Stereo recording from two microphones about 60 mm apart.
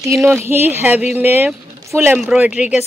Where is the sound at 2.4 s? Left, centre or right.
Centre.